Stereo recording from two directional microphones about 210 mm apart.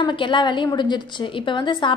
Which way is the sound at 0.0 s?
20° left (ahead or behind).